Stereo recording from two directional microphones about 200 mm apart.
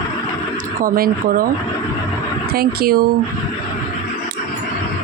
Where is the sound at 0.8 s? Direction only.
45° right (ahead or behind).